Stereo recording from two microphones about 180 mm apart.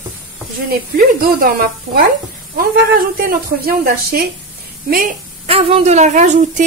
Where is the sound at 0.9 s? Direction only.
55° right (ahead or behind).